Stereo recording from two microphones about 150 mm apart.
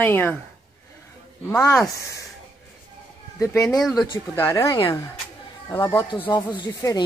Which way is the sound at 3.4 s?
20° left (ahead or behind).